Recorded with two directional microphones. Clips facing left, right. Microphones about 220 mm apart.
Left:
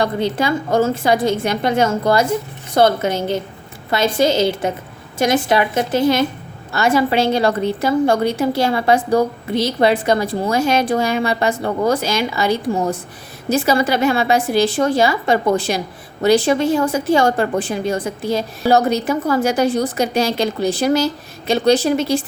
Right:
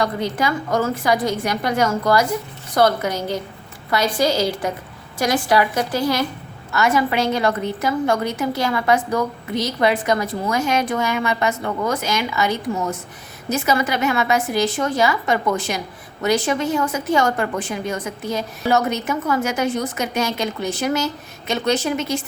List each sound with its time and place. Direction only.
0.0 s a woman's voice: 30° left (ahead or behind)